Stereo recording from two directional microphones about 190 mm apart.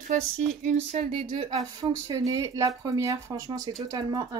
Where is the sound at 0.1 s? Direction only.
40° right (ahead or behind).